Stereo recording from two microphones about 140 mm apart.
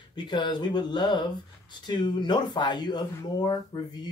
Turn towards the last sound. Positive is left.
turn(degrees=30)  # may be behind; listen again after turning